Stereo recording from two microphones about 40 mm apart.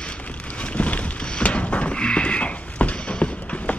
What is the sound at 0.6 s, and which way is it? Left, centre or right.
Horse, left.